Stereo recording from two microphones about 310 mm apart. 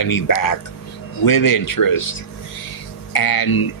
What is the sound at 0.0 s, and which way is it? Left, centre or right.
Speech, left.